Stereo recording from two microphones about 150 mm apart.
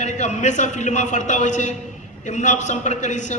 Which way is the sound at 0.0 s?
50° left (ahead or behind).